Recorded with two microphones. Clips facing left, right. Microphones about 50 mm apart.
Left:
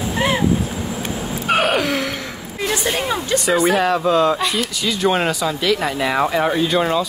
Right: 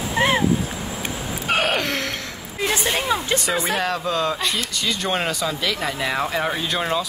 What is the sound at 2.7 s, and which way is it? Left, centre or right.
Speech, right.